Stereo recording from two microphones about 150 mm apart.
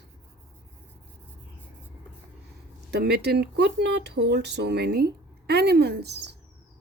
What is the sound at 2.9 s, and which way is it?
Speech, 90° right.